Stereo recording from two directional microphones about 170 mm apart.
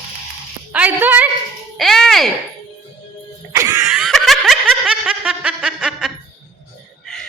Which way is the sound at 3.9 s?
Centre (ahead or behind).